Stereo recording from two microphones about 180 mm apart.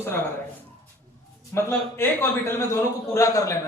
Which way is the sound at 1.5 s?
15° left (ahead or behind).